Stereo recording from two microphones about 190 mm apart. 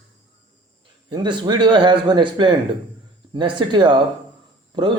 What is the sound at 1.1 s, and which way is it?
A man's voice, 25° right (ahead or behind).